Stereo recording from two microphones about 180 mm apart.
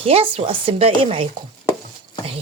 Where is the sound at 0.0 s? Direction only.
30° right (ahead or behind).